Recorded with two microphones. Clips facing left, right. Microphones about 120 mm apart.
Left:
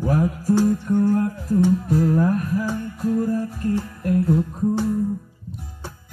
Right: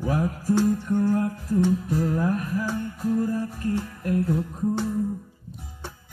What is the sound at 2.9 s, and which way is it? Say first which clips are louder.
Music: left 3 dB; centre (ahead or behind).